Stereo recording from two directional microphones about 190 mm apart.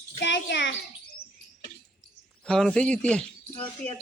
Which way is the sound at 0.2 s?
70° left (ahead or behind).